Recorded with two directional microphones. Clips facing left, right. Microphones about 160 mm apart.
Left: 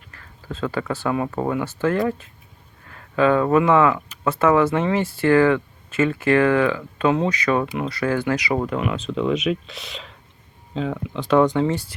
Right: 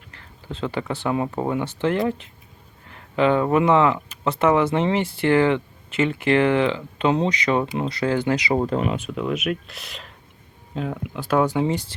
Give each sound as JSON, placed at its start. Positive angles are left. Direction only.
{"t": 0.1, "sound": "speech", "side_deg": -25}
{"t": 9.0, "sound": "speech", "side_deg": -10}
{"t": 11.6, "sound": "speech", "side_deg": -15}